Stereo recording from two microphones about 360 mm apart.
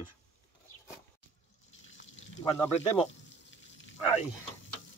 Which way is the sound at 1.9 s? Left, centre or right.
Left.